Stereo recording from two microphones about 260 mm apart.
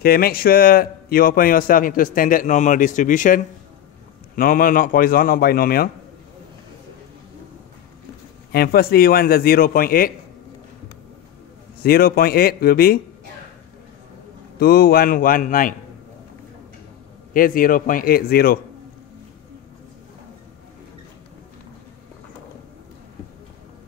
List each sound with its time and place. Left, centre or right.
0.0 s speech: left
8.5 s speech: left
11.8 s speech: left
14.6 s speech: left
17.3 s speech: left